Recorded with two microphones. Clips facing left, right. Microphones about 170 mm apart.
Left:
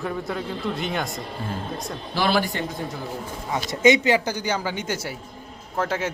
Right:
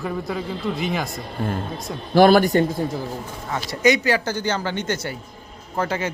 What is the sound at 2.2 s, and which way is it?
Speech, 45° right (ahead or behind).